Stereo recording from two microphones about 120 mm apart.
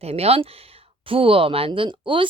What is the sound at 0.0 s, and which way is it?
A woman's voice, 60° right (ahead or behind).